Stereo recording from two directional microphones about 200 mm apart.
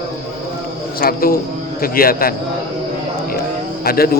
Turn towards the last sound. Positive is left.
turn(degrees=50)  # may be behind; listen again after turning